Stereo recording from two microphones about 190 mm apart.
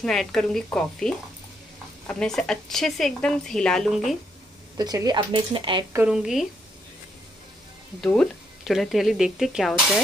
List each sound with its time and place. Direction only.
0.0 s speech: centre (ahead or behind)
4.7 s speech: 20° right (ahead or behind)
5.9 s speech: 5° right (ahead or behind)
8.0 s speech: 5° left (ahead or behind)